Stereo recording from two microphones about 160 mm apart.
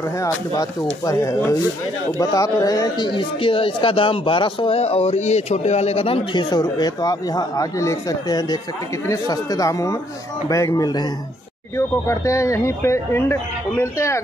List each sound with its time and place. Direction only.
0.2 s speech: 20° left (ahead or behind)